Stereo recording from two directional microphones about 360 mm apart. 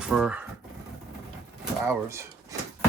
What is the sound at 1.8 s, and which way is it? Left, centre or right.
Speech, centre.